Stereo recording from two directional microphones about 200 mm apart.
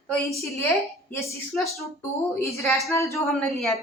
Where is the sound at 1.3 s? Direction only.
15° left (ahead or behind).